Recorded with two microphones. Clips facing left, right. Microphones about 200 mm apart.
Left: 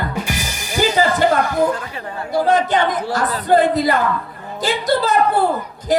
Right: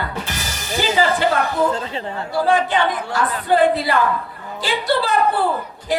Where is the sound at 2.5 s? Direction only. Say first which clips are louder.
Left 1 dB; 40° left (ahead or behind).